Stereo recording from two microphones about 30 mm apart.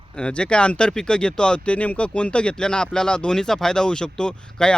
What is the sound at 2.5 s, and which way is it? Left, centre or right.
Speech, left.